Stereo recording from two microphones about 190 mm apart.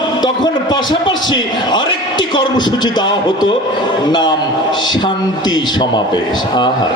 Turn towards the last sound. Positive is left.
turn(degrees=20)  # may be behind; listen again after turning